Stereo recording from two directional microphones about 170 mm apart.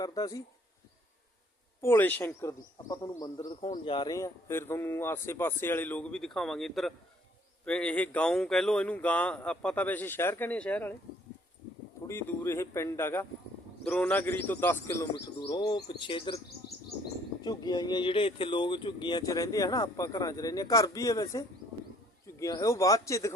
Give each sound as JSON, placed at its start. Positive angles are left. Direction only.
{"t": 0.0, "sound": "speech", "side_deg": 20}
{"t": 1.8, "sound": "speech", "side_deg": 15}
{"t": 12.0, "sound": "speech", "side_deg": 15}
{"t": 15.4, "sound": "speech", "side_deg": 25}
{"t": 17.4, "sound": "speech", "side_deg": 25}